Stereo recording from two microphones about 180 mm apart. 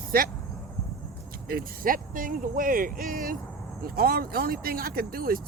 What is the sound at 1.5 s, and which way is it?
Speech, 55° right (ahead or behind).